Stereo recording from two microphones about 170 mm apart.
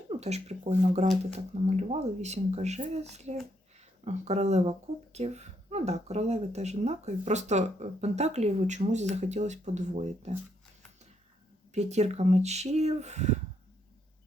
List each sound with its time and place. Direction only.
0.2 s speech: 40° right (ahead or behind)
11.7 s speech: 40° right (ahead or behind)